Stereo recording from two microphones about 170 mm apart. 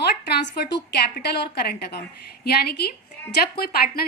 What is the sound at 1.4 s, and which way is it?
A woman's voice, 70° left (ahead or behind).